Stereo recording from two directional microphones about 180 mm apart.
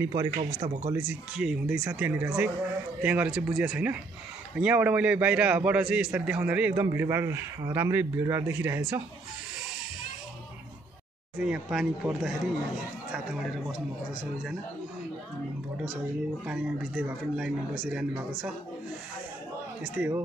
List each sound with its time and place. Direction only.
0.0 s speech: 20° right (ahead or behind)
0.8 s a man's voice: 5° right (ahead or behind)
11.3 s speech: 5° right (ahead or behind)
16.4 s a man's voice: 5° right (ahead or behind)
19.8 s a man's voice: 10° right (ahead or behind)